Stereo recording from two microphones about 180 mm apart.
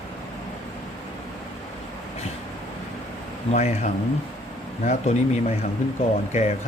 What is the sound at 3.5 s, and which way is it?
Speech, 40° left (ahead or behind).